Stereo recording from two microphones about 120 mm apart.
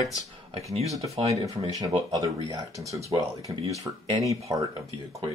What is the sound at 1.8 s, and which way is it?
Speech, 30° right (ahead or behind).